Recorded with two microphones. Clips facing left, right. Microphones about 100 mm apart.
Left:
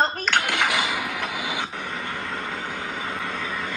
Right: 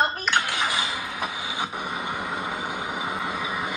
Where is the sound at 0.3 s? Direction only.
70° left (ahead or behind).